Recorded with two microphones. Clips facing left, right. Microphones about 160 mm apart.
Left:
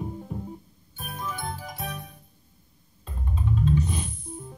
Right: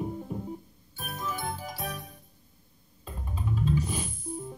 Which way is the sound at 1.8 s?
25° left (ahead or behind).